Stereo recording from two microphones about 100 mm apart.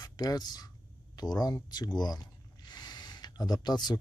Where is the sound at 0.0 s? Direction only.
40° left (ahead or behind).